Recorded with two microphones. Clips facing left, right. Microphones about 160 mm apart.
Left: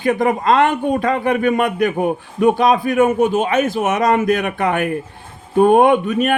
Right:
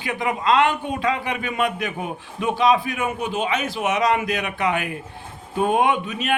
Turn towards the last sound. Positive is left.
turn(degrees=50)  # may be behind; listen again after turning